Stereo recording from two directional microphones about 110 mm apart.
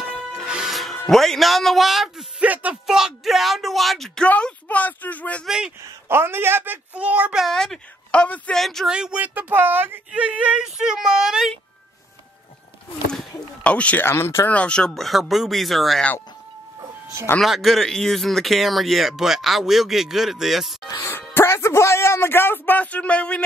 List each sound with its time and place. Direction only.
0.5 s speech: 5° right (ahead or behind)
2.4 s speech: 15° right (ahead or behind); by 5.5 s 15° left (ahead or behind)
6.0 s speech: 20° right (ahead or behind)
7.4 s speech: 5° left (ahead or behind)
13.7 s speech: 10° left (ahead or behind)
14.6 s speech: 10° left (ahead or behind)
17.4 s speech: centre (ahead or behind)
20.8 s speech: 30° left (ahead or behind)
21.3 s speech: 20° left (ahead or behind)